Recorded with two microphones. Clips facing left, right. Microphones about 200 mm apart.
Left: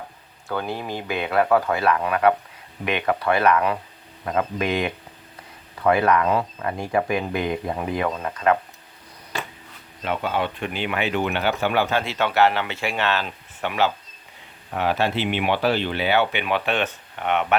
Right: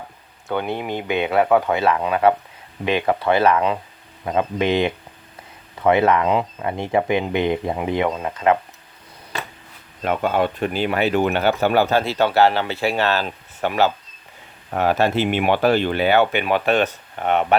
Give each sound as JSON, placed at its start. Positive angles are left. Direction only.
{"t": 0.4, "sound": "speech", "side_deg": -20}
{"t": 10.0, "sound": "speech", "side_deg": -50}